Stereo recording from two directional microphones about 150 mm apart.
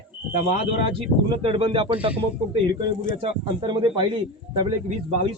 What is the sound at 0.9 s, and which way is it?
Speech, 40° right (ahead or behind).